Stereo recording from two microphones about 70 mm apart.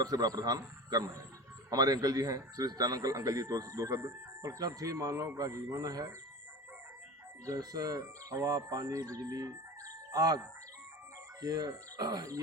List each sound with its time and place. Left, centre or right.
0.0 s a man's voice: right
7.4 s a man's voice: right